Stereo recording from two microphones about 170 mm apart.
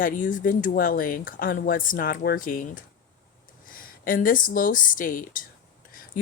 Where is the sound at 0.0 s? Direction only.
50° left (ahead or behind).